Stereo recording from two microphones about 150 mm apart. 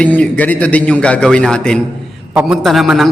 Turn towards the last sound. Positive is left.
turn(degrees=0)  # may be behind; listen again after turning